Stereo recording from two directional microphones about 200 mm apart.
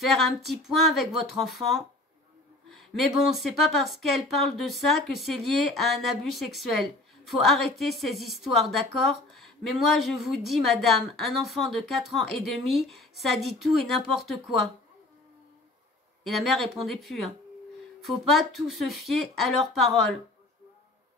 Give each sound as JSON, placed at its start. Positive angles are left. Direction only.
{"t": 0.0, "sound": "a woman's voice", "side_deg": 0}
{"t": 2.7, "sound": "a sound", "side_deg": 0}
{"t": 3.2, "sound": "a woman's voice", "side_deg": 0}
{"t": 16.3, "sound": "a woman's voice", "side_deg": 0}